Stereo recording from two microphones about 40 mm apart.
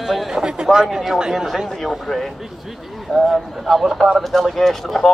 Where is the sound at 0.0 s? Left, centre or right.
Centre.